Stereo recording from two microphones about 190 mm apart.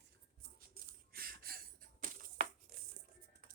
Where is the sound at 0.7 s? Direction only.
50° right (ahead or behind).